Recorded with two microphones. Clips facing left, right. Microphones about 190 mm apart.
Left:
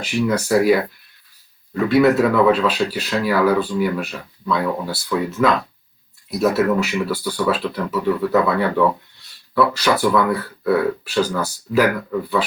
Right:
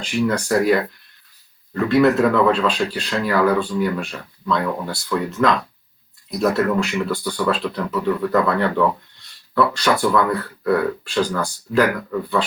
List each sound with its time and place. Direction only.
0.0 s speech: 5° left (ahead or behind)